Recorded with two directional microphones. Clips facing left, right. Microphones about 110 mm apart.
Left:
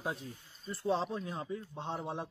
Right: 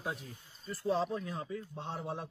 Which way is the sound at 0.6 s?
30° left (ahead or behind).